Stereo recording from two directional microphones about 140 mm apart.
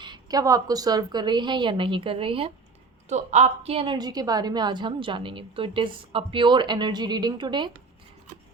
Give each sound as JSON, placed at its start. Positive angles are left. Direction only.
{"t": 0.0, "sound": "a woman's voice", "side_deg": -30}
{"t": 3.1, "sound": "a woman's voice", "side_deg": -55}
{"t": 3.9, "sound": "a woman's voice", "side_deg": -30}